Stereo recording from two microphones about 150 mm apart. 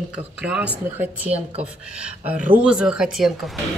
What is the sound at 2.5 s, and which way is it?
Speech, 5° right (ahead or behind).